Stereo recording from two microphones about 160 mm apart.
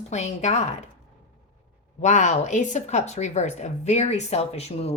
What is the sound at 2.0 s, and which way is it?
A woman's voice, 45° left (ahead or behind).